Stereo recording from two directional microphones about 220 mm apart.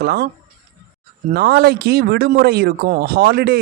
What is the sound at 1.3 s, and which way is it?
Speech, 45° right (ahead or behind).